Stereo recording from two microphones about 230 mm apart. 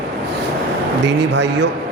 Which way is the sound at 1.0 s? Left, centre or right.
Right.